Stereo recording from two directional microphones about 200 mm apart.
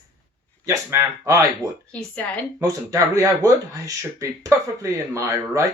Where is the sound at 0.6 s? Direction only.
15° right (ahead or behind).